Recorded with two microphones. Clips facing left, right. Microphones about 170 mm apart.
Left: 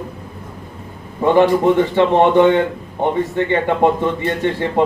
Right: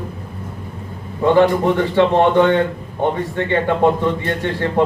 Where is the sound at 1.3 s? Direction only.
20° left (ahead or behind).